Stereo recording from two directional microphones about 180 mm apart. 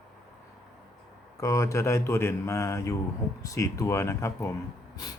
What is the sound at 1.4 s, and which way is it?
Speech, 15° left (ahead or behind).